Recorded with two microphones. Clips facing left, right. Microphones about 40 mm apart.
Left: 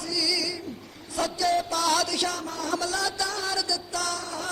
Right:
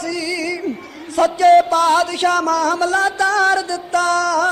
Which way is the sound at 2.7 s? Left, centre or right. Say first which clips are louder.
Right 11 dB; right.